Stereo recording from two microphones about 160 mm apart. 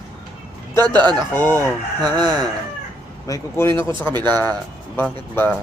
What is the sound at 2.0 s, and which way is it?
Speech, 25° right (ahead or behind).